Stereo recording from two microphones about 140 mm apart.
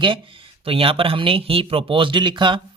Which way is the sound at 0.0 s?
35° right (ahead or behind).